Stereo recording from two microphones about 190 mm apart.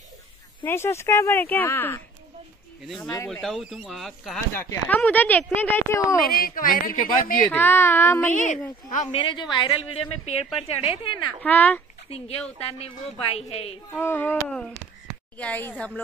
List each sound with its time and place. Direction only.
0.7 s speech: 15° left (ahead or behind)
2.9 s speech: centre (ahead or behind)
4.6 s speech: 10° left (ahead or behind)
6.2 s a woman's voice: 50° left (ahead or behind)
7.4 s a woman's voice: 10° left (ahead or behind); by 11.2 s 30° left (ahead or behind)
11.4 s speech: 10° left (ahead or behind)
12.6 s a woman's voice: 30° left (ahead or behind)
13.9 s speech: 10° left (ahead or behind)